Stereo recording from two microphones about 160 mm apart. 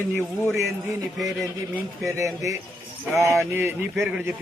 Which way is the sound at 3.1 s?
15° right (ahead or behind).